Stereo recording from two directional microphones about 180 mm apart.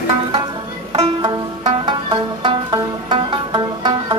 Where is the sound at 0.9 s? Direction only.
25° right (ahead or behind).